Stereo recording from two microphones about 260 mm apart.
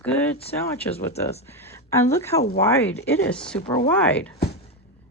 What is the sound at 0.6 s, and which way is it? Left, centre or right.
Speech, centre.